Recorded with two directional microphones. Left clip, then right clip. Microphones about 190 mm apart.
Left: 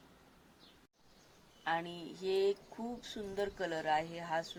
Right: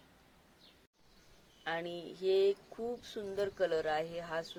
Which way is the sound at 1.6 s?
15° right (ahead or behind).